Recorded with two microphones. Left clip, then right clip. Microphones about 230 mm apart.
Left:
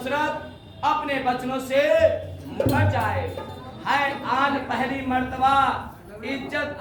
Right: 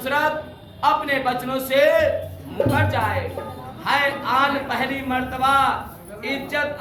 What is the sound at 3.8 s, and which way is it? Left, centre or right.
Speech, centre.